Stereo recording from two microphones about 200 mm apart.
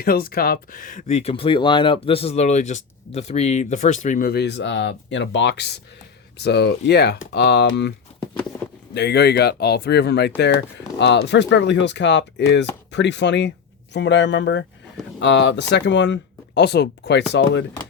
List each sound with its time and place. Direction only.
0.0 s speech: 50° left (ahead or behind)
9.0 s speech: 55° left (ahead or behind)